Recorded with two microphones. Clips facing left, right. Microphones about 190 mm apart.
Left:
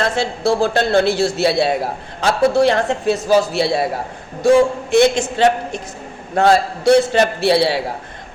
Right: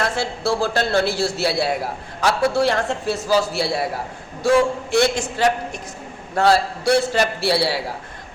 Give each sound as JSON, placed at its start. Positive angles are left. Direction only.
{"t": 0.0, "sound": "a man's voice", "side_deg": 20}